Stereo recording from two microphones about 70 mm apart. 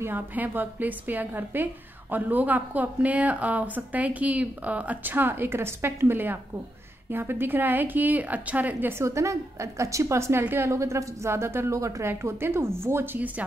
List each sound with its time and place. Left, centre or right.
0.0 s a woman's voice: right
9.0 s a woman's voice: right